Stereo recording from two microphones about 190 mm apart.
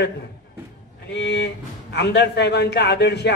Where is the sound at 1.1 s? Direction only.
65° left (ahead or behind).